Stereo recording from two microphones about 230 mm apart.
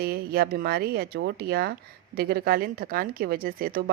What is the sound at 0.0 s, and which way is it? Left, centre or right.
A woman's voice, right.